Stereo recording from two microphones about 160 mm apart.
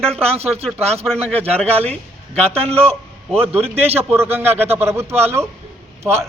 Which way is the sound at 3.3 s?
5° left (ahead or behind).